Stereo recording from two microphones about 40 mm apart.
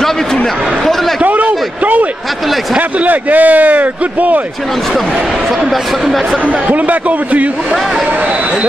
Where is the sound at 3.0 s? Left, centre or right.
Right.